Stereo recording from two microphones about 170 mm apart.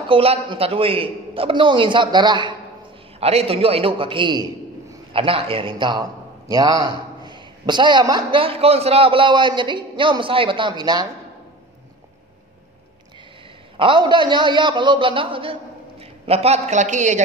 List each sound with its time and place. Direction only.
0.1 s a man's voice: 35° right (ahead or behind)
3.2 s a man's voice: 35° right (ahead or behind)
13.7 s a man's voice: 30° right (ahead or behind); by 17.2 s 45° right (ahead or behind)